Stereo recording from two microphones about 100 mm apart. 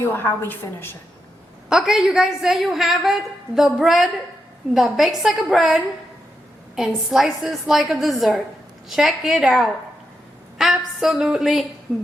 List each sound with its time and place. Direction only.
0.0 s a woman's voice: 20° left (ahead or behind)
1.7 s a woman's voice: 5° right (ahead or behind)